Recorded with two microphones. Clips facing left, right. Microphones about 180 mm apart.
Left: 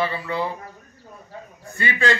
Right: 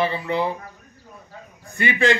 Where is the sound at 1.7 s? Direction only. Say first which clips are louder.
Right 3 dB; 15° right (ahead or behind).